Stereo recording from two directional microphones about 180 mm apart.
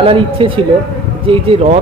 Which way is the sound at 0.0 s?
30° right (ahead or behind).